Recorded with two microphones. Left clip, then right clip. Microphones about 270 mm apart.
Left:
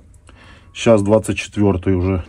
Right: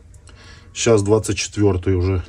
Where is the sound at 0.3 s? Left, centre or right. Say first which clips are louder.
Even; left.